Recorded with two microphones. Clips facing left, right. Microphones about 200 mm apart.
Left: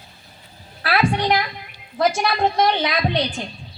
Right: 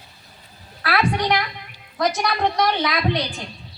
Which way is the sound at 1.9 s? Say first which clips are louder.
Left 2 dB; 25° left (ahead or behind).